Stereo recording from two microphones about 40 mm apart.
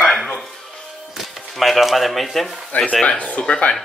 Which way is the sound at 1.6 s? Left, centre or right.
Centre.